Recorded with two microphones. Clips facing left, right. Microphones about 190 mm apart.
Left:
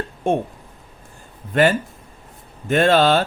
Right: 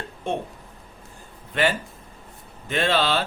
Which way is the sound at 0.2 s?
50° left (ahead or behind).